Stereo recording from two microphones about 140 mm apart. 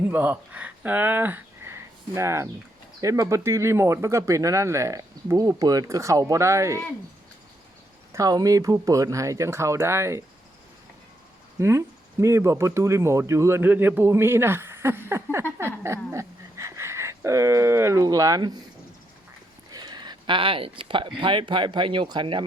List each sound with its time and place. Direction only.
0.1 s speech: 10° right (ahead or behind)
8.1 s speech: 25° right (ahead or behind)
11.6 s speech: 20° right (ahead or behind)
19.7 s speech: 30° right (ahead or behind)